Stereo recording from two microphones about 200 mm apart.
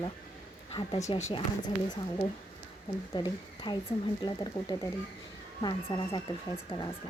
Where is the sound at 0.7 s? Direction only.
25° left (ahead or behind).